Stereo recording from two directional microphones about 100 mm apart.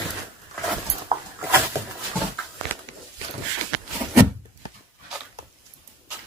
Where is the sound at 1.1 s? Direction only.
70° right (ahead or behind).